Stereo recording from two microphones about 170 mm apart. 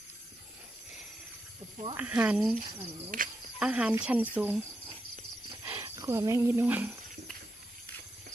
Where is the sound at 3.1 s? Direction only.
50° right (ahead or behind).